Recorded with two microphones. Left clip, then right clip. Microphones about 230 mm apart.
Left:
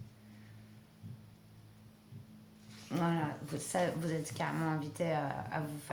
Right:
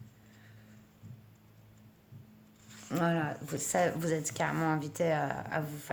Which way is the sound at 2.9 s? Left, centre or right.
Right.